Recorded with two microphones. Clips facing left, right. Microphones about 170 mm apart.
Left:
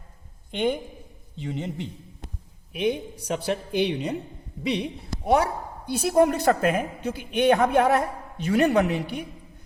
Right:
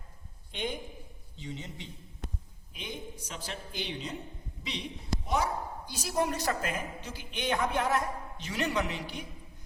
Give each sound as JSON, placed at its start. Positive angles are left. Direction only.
{"t": 0.5, "sound": "a woman's voice", "side_deg": 60}
{"t": 2.7, "sound": "a woman's voice", "side_deg": 70}